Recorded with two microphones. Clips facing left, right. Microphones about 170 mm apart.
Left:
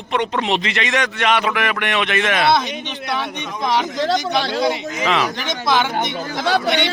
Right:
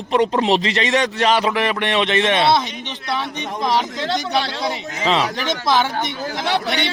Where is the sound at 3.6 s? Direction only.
Centre (ahead or behind).